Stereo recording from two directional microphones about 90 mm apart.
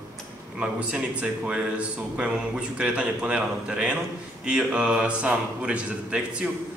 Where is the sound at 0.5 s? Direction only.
10° right (ahead or behind).